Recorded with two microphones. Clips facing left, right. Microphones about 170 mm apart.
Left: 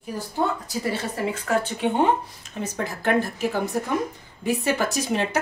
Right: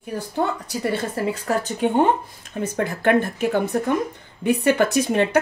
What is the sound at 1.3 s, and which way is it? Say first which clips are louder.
Speech: right 1 dB; 40° right (ahead or behind).